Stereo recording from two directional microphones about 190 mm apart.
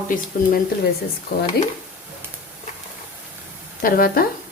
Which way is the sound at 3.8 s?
50° left (ahead or behind).